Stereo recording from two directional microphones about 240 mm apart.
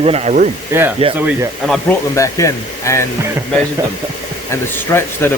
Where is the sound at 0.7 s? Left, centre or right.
Centre.